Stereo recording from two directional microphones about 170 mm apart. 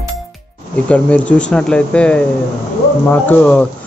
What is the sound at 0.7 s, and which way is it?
Speech, 5° left (ahead or behind).